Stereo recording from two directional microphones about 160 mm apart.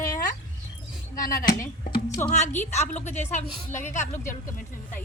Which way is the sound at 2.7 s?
45° left (ahead or behind).